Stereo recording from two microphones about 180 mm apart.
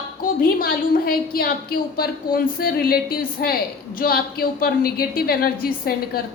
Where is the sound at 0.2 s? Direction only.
55° left (ahead or behind).